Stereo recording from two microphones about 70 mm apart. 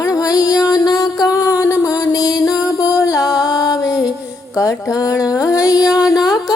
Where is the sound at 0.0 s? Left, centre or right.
Left.